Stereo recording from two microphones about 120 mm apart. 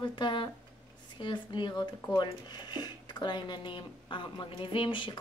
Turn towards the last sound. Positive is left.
turn(degrees=45)  # may be behind; listen again after turning